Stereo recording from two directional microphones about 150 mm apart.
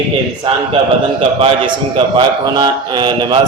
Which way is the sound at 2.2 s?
30° right (ahead or behind).